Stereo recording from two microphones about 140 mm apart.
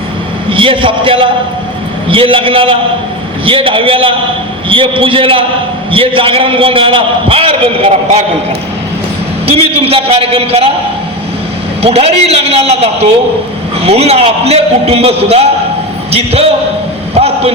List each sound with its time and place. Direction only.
0.5 s a man's voice: 40° right (ahead or behind)
9.5 s a man's voice: 45° right (ahead or behind)
11.8 s a man's voice: 45° right (ahead or behind)
17.2 s a sound: 45° right (ahead or behind)